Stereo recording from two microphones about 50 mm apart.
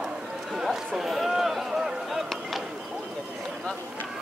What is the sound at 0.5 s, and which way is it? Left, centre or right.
Speech, centre.